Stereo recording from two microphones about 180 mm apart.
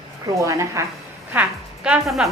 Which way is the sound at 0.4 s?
15° right (ahead or behind).